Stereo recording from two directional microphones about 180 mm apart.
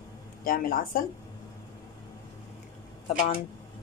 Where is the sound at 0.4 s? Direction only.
55° left (ahead or behind).